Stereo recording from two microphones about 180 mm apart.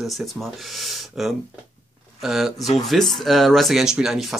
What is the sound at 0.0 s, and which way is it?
Speech, centre (ahead or behind).